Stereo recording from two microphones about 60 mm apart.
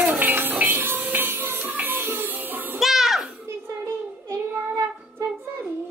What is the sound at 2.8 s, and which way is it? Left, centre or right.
Music, centre.